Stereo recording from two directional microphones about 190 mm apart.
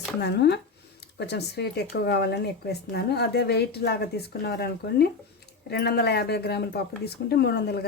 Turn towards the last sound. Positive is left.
turn(degrees=60)  # may be behind; listen again after turning